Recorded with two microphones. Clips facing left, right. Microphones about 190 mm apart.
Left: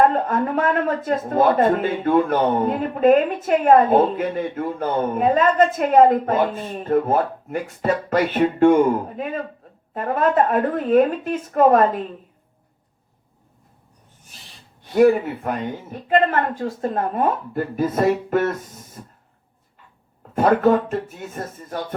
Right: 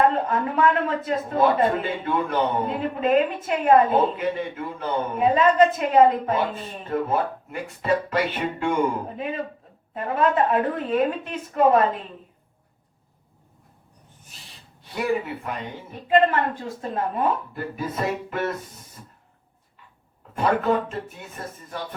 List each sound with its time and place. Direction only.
0.1 s a man's voice: 45° left (ahead or behind)
14.9 s a man's voice: 45° left (ahead or behind)
20.3 s a man's voice: 50° left (ahead or behind)